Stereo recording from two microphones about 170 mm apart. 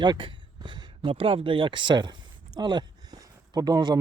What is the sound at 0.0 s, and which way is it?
Speech, 25° right (ahead or behind).